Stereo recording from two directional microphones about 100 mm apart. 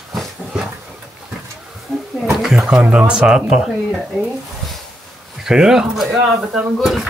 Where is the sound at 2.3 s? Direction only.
5° right (ahead or behind).